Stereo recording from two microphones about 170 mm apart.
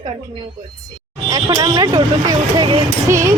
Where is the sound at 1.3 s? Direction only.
20° right (ahead or behind).